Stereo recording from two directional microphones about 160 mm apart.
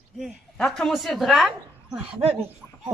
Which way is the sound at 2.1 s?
40° right (ahead or behind).